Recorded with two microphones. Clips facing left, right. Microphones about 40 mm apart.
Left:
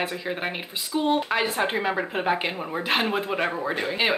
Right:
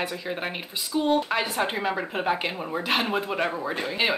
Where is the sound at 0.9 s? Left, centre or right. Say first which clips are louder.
Even; left.